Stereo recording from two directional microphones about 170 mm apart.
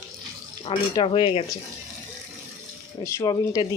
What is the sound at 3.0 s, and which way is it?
Speech, 20° left (ahead or behind).